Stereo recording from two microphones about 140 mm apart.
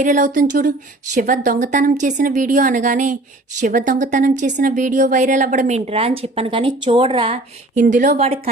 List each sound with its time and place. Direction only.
0.0 s a woman's voice: 65° right (ahead or behind); by 7.3 s 40° right (ahead or behind)
7.9 s a woman's voice: 60° right (ahead or behind)